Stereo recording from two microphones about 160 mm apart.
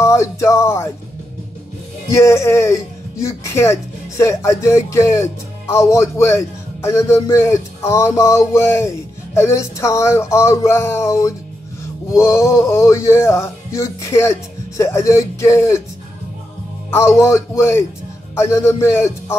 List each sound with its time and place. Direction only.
0.0 s speech: 15° left (ahead or behind)
2.0 s speech: 15° left (ahead or behind)
16.9 s speech: 15° left (ahead or behind)